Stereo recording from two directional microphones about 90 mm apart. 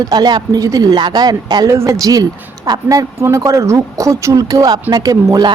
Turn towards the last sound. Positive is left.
turn(degrees=-45)  # may be behind; listen again after turning